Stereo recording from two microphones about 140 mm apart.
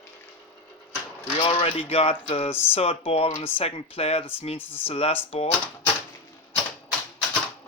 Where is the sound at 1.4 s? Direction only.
40° left (ahead or behind).